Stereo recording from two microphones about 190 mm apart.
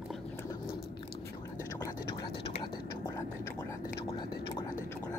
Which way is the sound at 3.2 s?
15° left (ahead or behind).